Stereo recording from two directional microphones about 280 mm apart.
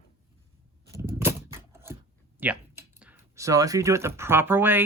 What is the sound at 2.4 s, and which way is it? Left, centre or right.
Speech, centre.